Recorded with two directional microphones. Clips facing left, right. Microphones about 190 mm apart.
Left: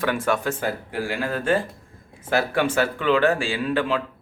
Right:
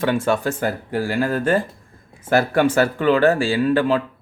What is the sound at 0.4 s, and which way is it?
Speech, 45° right (ahead or behind).